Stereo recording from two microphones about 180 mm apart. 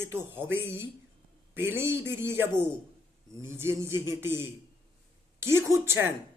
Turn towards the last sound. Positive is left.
turn(degrees=-15)  # may be behind; listen again after turning